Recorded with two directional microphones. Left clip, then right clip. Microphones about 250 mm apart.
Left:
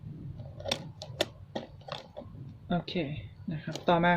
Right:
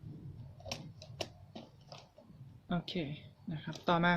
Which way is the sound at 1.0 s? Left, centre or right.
Left.